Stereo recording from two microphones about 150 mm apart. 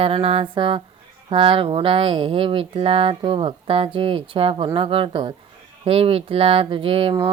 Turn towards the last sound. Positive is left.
turn(degrees=-35)  # may be behind; listen again after turning